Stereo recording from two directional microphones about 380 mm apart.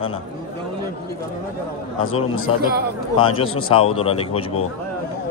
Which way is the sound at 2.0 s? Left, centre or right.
Left.